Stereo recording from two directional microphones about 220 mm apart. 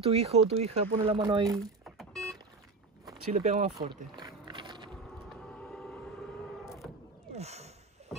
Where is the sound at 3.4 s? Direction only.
30° right (ahead or behind).